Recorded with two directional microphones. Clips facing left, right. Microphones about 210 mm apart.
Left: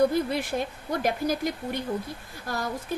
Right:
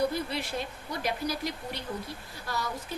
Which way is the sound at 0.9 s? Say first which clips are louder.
Left 6 dB; 50° left (ahead or behind).